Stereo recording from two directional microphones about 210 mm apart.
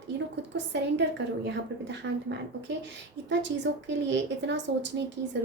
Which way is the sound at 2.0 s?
65° right (ahead or behind).